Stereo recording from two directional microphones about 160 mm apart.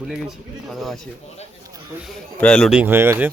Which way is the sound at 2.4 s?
5° left (ahead or behind).